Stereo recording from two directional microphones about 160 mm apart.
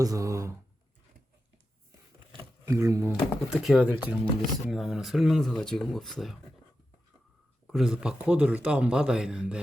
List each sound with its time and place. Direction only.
0.0 s speech: 20° right (ahead or behind)
2.6 s speech: 20° right (ahead or behind)
3.1 s speech: 5° right (ahead or behind)
7.7 s speech: 5° right (ahead or behind)